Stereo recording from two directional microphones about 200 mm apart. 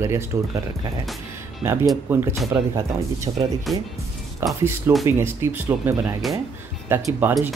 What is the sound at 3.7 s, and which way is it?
Speech, centre (ahead or behind).